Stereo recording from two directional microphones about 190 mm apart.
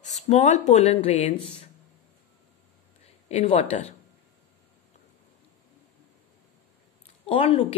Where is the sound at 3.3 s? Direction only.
30° left (ahead or behind).